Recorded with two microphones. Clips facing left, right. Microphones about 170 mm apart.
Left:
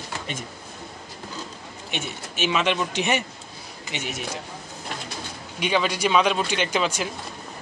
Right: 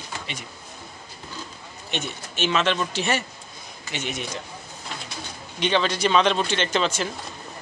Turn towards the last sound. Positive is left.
turn(degrees=10)  # may be behind; listen again after turning